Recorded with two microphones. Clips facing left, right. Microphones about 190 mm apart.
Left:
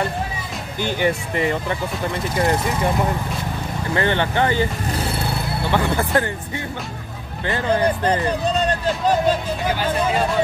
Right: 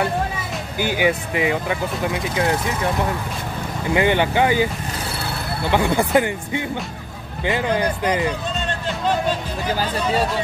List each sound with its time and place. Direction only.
0.7 s speech: 10° right (ahead or behind)
3.9 s speech: 10° right (ahead or behind)
5.7 s speech: 15° right (ahead or behind)
8.6 s a sound: 40° left (ahead or behind)